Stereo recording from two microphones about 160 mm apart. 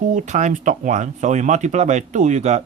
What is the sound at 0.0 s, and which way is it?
Speech, 50° right (ahead or behind).